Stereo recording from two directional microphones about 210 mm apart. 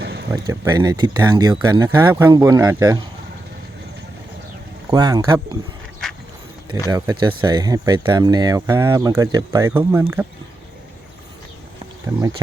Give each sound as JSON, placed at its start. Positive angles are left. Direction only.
{"t": 0.0, "sound": "a sound", "side_deg": -50}
{"t": 0.3, "sound": "speech", "side_deg": -15}
{"t": 4.9, "sound": "speech", "side_deg": -20}
{"t": 6.9, "sound": "speech", "side_deg": -20}